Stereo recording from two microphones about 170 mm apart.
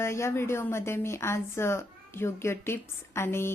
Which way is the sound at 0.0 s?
15° left (ahead or behind).